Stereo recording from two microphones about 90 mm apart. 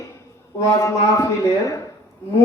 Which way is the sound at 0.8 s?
35° left (ahead or behind).